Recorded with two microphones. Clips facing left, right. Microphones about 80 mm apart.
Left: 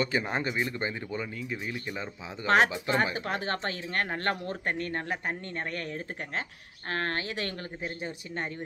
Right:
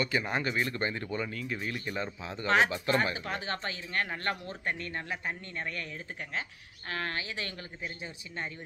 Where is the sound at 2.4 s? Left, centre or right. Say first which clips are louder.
Left 3 dB; left.